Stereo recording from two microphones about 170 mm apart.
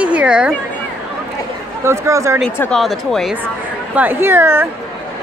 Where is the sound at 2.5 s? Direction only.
10° left (ahead or behind).